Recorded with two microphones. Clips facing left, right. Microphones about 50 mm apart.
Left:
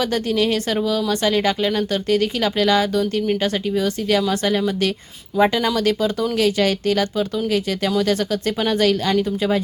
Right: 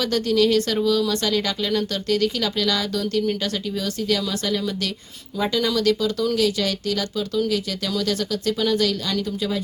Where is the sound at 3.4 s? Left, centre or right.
Left.